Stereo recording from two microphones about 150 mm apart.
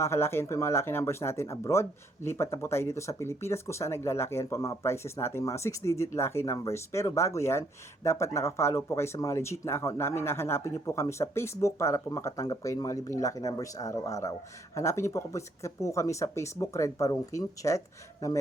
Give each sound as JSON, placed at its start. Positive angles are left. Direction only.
{"t": 0.0, "sound": "speech", "side_deg": 15}